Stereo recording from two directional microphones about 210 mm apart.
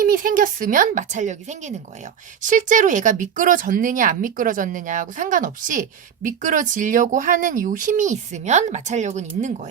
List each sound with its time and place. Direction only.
0.0 s speech: 40° right (ahead or behind)